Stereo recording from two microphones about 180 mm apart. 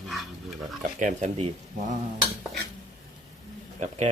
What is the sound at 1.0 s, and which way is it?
Speech, 40° right (ahead or behind).